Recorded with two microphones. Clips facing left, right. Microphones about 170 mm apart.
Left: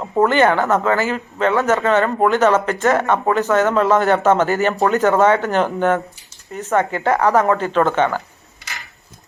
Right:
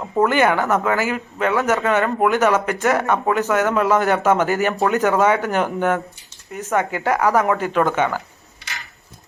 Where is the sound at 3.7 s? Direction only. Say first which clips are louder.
Left 2 dB; 10° right (ahead or behind).